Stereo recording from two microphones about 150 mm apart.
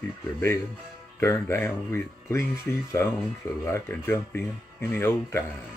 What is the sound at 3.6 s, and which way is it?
Speech, 15° left (ahead or behind).